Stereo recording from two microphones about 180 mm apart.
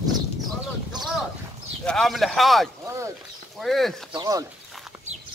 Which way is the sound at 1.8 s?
5° left (ahead or behind).